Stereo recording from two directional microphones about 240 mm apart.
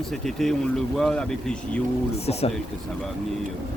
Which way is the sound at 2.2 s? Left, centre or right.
Left.